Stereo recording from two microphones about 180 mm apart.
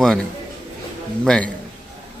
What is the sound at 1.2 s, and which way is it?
Speech, 5° left (ahead or behind).